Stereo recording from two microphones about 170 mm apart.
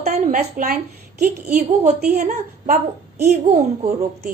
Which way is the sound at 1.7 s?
35° right (ahead or behind).